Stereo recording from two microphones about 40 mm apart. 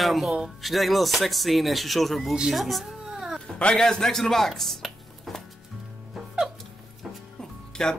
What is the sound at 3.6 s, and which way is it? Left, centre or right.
Speech, left.